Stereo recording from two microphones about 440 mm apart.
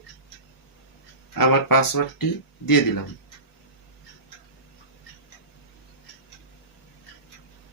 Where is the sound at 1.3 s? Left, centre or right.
Left.